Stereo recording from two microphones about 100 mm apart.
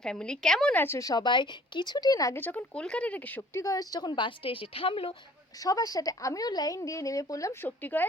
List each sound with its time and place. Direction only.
0.0 s speech: 10° left (ahead or behind)
0.8 s a woman's voice: 30° left (ahead or behind)
1.2 s speech: 50° left (ahead or behind)
2.3 s speech: 20° left (ahead or behind)
3.6 s a woman's voice: 35° left (ahead or behind); by 5.1 s 65° left (ahead or behind)
5.5 s a woman's voice: 35° left (ahead or behind); by 8.0 s 20° left (ahead or behind)